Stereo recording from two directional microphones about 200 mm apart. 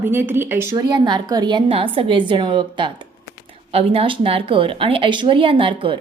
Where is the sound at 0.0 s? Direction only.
10° right (ahead or behind).